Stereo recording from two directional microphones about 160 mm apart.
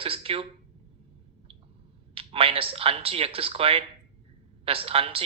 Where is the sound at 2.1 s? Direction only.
35° right (ahead or behind).